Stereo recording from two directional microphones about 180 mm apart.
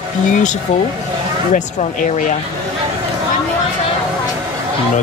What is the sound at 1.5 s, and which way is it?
Speech, 45° left (ahead or behind).